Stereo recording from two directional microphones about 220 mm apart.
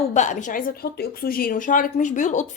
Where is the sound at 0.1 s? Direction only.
35° left (ahead or behind).